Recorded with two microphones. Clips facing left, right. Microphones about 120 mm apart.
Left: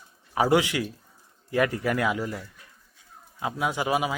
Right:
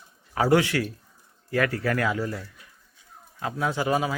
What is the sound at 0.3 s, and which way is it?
Speech, 15° left (ahead or behind).